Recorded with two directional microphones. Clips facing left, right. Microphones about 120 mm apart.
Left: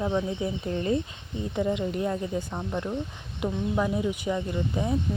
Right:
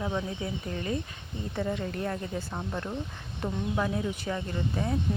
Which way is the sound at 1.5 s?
20° left (ahead or behind).